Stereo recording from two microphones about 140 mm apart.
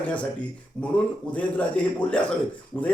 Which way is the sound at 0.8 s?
5° left (ahead or behind).